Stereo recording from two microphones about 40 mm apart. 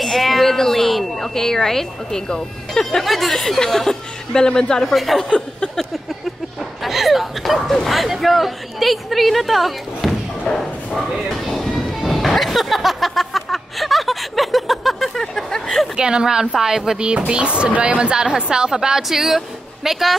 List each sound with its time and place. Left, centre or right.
0.0 s a woman's voice: centre
3.0 s speech: centre
4.9 s speech: centre
6.8 s speech: centre
11.5 s train: centre
12.0 s music: centre
16.0 s a woman's voice: centre
17.3 s speech: right
18.1 s a woman's voice: centre